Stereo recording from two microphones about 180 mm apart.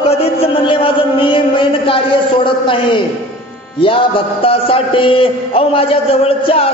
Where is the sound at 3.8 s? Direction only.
30° left (ahead or behind).